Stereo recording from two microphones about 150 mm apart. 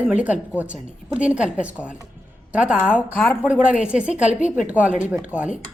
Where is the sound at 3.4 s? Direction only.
5° right (ahead or behind).